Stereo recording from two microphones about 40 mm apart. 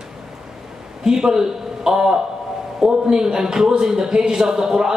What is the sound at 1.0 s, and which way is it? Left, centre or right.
A man's voice, centre.